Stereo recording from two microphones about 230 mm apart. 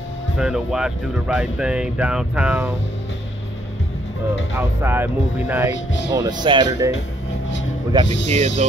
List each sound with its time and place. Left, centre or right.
0.4 s speech: centre
4.6 s speech: centre
8.3 s speech: right